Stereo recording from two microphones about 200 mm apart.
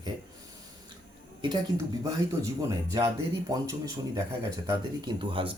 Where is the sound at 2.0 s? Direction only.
15° right (ahead or behind).